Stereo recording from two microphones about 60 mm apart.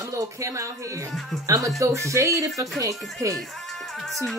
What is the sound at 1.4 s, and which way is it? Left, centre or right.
Speech, right.